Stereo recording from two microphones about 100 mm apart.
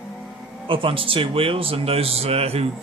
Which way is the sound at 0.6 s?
60° right (ahead or behind).